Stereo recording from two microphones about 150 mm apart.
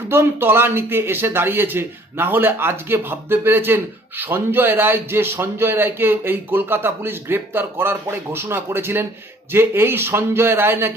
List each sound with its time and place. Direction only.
0.1 s a man's voice: 15° right (ahead or behind)